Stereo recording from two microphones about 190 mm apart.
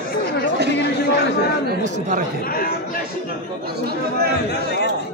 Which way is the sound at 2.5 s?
50° left (ahead or behind).